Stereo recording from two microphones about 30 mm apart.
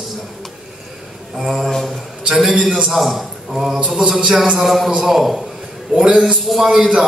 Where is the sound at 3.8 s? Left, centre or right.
Right.